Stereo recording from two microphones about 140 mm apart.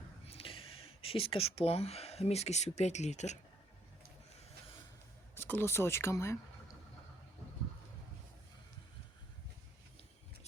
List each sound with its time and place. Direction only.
0.3 s speech: 40° left (ahead or behind)
5.3 s speech: 15° left (ahead or behind)